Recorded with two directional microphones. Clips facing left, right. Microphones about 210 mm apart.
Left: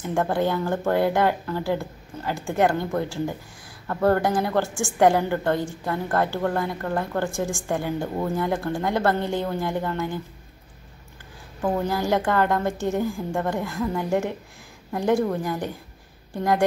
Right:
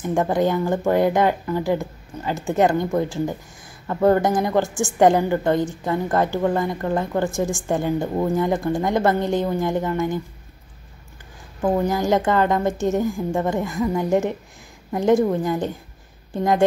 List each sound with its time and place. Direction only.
0.3 s a woman's voice: 15° right (ahead or behind)
11.6 s a woman's voice: 20° right (ahead or behind)